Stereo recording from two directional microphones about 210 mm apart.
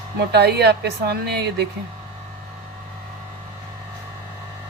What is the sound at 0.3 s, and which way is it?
Speech, 50° right (ahead or behind).